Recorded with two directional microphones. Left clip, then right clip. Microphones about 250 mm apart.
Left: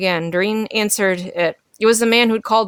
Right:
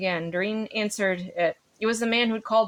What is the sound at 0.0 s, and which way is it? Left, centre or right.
Speech, left.